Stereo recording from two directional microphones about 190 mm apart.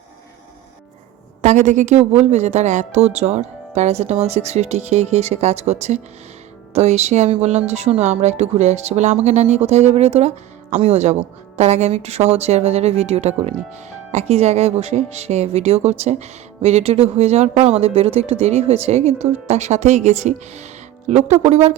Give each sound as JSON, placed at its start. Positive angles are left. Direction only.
{"t": 1.4, "sound": "speech", "side_deg": -40}